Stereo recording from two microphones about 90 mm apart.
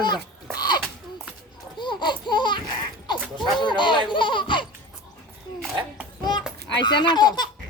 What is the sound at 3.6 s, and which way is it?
Speech, 60° left (ahead or behind).